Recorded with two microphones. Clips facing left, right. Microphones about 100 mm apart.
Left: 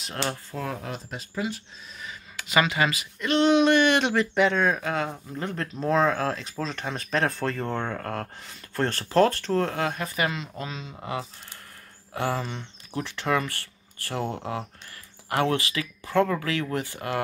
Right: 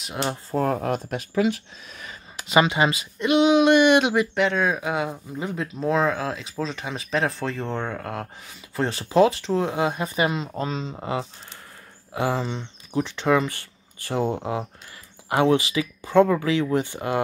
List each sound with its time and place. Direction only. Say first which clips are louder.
0.0 s speech: right 3 dB; centre (ahead or behind)
0.5 s speech: right 9 dB; 45° right (ahead or behind)
1.3 s speech: right 9 dB; 75° right (ahead or behind)
2.3 s speech: right 4 dB; 25° right (ahead or behind)
3.3 s a sound: right 3 dB; 10° right (ahead or behind)
4.4 s speech: even; 5° right (ahead or behind); by 17.2 s 20° right (ahead or behind)